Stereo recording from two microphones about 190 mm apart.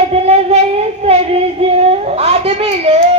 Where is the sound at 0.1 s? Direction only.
35° right (ahead or behind).